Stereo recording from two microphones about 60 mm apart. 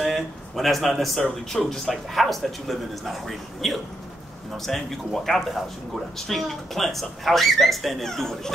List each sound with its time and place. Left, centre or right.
0.0 s speech: centre